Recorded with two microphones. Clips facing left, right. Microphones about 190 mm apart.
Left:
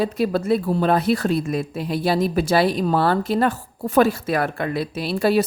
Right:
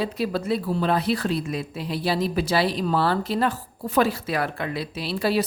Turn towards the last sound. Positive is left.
turn(degrees=50)  # may be behind; listen again after turning